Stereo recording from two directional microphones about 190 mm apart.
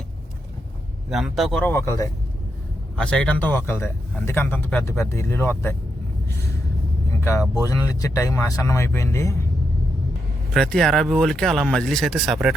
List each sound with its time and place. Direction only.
1.1 s speech: centre (ahead or behind)
7.1 s vehicle: 15° left (ahead or behind)
7.6 s speech: 20° left (ahead or behind)
10.5 s speech: 5° left (ahead or behind)